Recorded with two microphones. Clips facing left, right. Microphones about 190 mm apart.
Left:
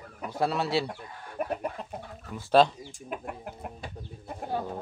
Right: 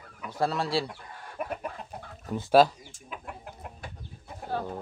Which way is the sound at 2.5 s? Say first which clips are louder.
Right 1 dB; 5° right (ahead or behind).